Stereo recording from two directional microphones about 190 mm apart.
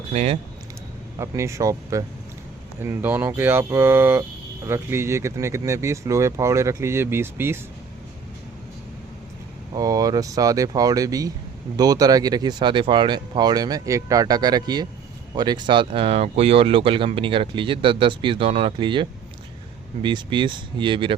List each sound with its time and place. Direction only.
0.1 s speech: 35° right (ahead or behind)
1.2 s speech: 15° right (ahead or behind)
9.7 s speech: 20° right (ahead or behind)